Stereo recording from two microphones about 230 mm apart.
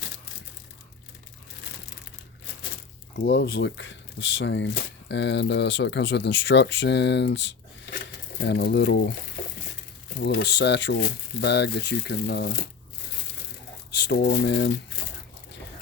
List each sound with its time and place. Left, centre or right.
3.2 s speech: left
10.2 s speech: left
13.9 s speech: left